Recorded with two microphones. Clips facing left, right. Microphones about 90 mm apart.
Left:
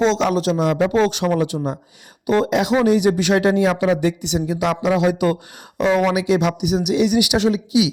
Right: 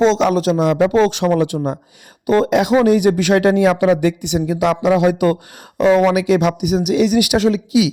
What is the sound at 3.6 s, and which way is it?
Speech, 60° right (ahead or behind).